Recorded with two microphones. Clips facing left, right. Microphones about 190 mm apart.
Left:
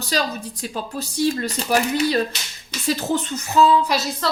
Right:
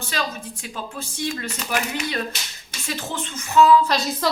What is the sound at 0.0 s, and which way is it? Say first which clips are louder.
Speech: left 4 dB; 35° left (ahead or behind).